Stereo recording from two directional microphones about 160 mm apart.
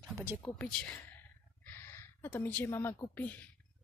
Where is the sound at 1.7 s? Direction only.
15° left (ahead or behind).